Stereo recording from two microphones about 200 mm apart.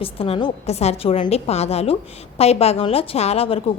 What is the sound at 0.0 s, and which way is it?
A woman's voice, 30° left (ahead or behind).